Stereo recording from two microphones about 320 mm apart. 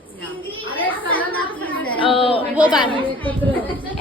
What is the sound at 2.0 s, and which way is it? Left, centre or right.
Speech, centre.